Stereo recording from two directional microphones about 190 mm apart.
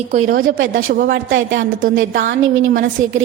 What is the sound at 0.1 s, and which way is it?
Speech, 45° right (ahead or behind).